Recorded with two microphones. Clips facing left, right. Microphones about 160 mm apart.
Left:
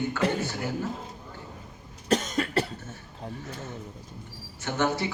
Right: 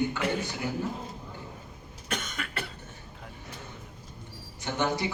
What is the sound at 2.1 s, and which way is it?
Cough, 35° left (ahead or behind).